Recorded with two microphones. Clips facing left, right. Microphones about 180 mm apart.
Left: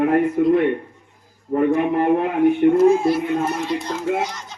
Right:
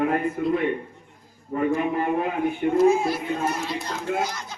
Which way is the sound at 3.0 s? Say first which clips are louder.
Left 6 dB; centre (ahead or behind).